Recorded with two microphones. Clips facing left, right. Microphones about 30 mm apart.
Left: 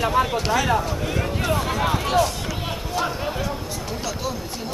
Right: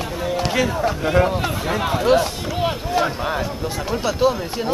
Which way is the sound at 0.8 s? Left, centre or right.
Right.